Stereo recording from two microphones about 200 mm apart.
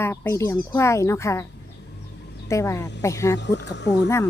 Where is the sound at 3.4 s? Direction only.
60° left (ahead or behind).